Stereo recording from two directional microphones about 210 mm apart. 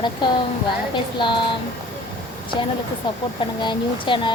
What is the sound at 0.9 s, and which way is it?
Speech, 20° left (ahead or behind).